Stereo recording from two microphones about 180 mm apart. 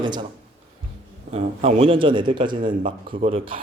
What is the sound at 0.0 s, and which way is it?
Speech, 25° right (ahead or behind).